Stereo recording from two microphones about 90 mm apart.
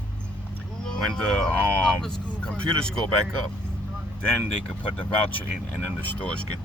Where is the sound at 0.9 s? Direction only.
5° left (ahead or behind).